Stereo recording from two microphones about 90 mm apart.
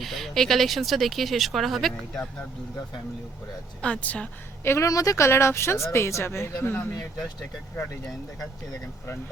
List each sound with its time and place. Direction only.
0.0 s speech: centre (ahead or behind)
3.8 s speech: 10° left (ahead or behind)
4.6 s speech: 30° left (ahead or behind)